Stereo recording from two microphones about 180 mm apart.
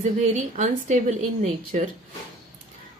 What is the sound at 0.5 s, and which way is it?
Speech, 40° right (ahead or behind).